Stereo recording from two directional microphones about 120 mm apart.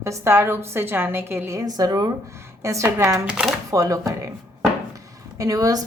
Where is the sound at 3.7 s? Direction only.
25° right (ahead or behind).